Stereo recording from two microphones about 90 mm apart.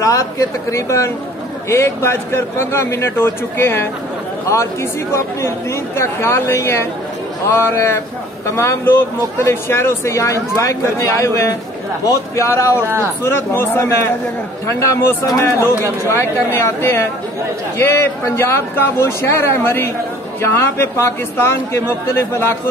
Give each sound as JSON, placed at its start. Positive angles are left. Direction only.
{"t": 0.0, "sound": "a man's voice", "side_deg": 40}
{"t": 5.9, "sound": "a man's voice", "side_deg": 30}